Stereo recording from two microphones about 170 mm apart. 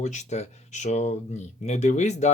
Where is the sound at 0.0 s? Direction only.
45° left (ahead or behind).